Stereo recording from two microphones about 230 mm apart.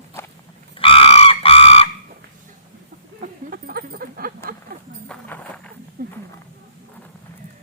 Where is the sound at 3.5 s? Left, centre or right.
Right.